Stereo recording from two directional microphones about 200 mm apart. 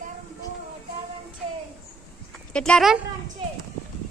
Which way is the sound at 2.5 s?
5° left (ahead or behind).